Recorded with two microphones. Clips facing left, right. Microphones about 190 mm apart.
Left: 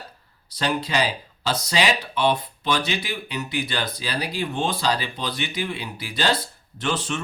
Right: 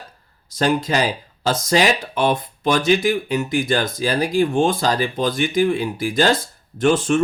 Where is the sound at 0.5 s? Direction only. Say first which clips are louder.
Right 5 dB; 45° right (ahead or behind).